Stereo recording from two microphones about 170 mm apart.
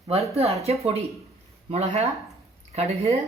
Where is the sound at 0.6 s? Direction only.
35° right (ahead or behind).